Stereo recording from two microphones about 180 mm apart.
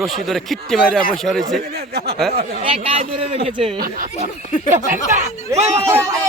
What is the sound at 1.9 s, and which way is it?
Speech, 65° right (ahead or behind).